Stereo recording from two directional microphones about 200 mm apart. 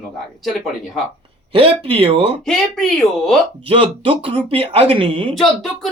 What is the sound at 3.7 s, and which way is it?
Speech, 25° right (ahead or behind).